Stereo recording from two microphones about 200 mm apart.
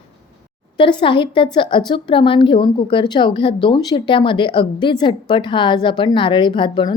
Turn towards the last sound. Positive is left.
turn(degrees=25)  # may be behind; listen again after turning